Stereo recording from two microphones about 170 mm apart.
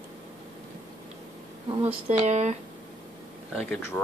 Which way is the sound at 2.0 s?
40° right (ahead or behind).